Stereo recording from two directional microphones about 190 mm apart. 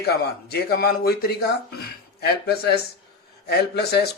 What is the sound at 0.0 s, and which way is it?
Speech, 55° left (ahead or behind).